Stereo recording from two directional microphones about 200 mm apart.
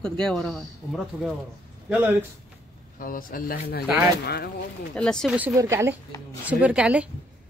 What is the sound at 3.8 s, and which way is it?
Speech, 5° right (ahead or behind).